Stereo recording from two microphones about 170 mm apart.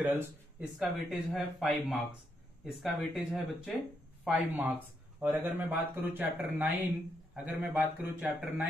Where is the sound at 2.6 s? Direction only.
Centre (ahead or behind).